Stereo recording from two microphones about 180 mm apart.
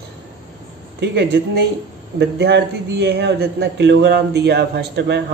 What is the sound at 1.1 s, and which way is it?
A man's voice, 65° right (ahead or behind).